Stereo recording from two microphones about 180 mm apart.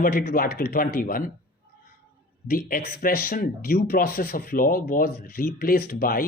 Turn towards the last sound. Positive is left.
turn(degrees=55)  # may be behind; listen again after turning